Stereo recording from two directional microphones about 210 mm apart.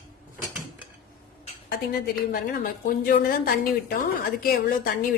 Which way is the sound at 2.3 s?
45° left (ahead or behind).